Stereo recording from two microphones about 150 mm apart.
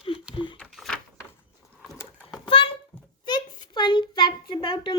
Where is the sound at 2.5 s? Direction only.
35° left (ahead or behind).